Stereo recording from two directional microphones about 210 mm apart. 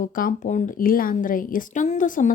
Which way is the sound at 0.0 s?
40° left (ahead or behind).